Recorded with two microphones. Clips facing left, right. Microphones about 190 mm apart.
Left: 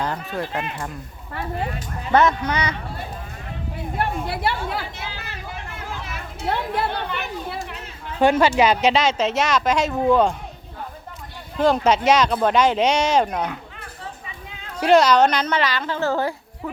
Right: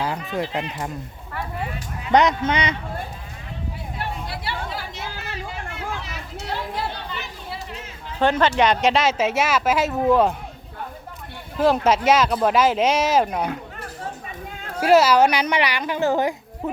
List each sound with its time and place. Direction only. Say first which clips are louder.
0.0 s a woman's voice: right 1 dB; 10° right (ahead or behind)
2.1 s speech: right 1 dB; 20° right (ahead or behind)
3.9 s chatter: left 7 dB; 55° left (ahead or behind)
8.2 s speech: left 2 dB; 10° left (ahead or behind)
11.5 s speech: even; 5° right (ahead or behind)
14.0 s a sound: right 3 dB; 45° right (ahead or behind)
14.8 s a woman's voice: even; 5° right (ahead or behind)